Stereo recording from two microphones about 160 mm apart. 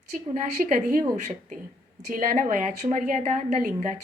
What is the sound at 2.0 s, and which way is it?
A woman's voice, 60° right (ahead or behind).